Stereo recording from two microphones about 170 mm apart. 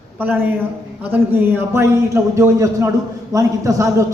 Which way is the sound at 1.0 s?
10° right (ahead or behind).